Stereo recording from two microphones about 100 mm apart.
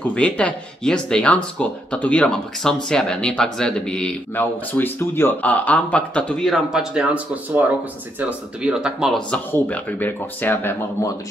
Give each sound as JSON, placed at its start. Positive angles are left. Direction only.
{"t": 0.1, "sound": "speech", "side_deg": 10}
{"t": 4.4, "sound": "speech", "side_deg": 20}
{"t": 6.5, "sound": "speech", "side_deg": -5}
{"t": 8.2, "sound": "speech", "side_deg": -15}
{"t": 9.5, "sound": "speech", "side_deg": 20}